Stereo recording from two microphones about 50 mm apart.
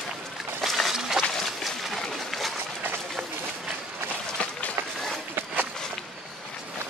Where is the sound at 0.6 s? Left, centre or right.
Centre.